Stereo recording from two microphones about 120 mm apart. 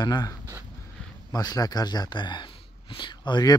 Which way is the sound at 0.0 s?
35° left (ahead or behind).